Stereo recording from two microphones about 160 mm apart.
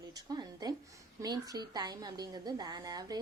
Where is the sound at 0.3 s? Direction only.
25° right (ahead or behind).